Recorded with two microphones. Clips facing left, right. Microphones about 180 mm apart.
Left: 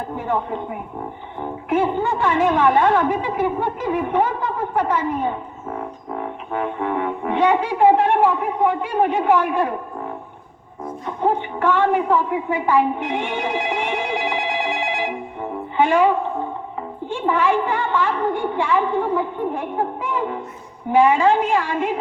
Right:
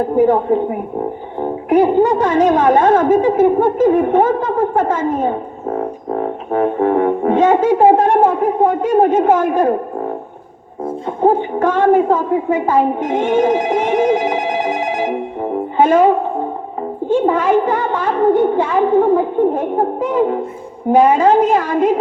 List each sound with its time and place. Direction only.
0.0 s music: 40° right (ahead or behind)
11.2 s a woman's voice: 45° right (ahead or behind)
17.1 s music: 40° right (ahead or behind)